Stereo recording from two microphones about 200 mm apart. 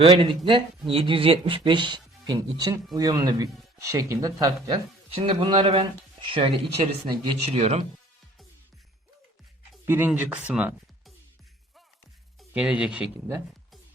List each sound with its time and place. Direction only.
0.0 s speech: 25° right (ahead or behind)
9.8 s speech: 10° right (ahead or behind)
12.4 s speech: 5° right (ahead or behind)